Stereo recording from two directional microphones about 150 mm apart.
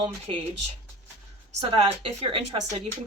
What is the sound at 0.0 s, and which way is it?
Speech, 35° right (ahead or behind).